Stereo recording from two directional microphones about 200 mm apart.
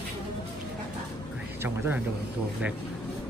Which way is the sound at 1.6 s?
10° right (ahead or behind).